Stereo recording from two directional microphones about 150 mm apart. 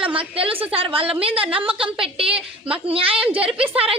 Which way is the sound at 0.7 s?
40° right (ahead or behind).